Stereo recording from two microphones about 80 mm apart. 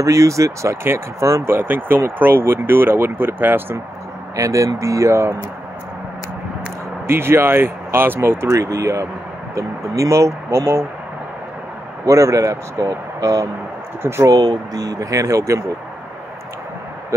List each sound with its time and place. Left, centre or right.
0.0 s speech: right
4.4 s speech: right
7.1 s speech: right
12.1 s speech: right
14.0 s speech: right
14.3 s speech: right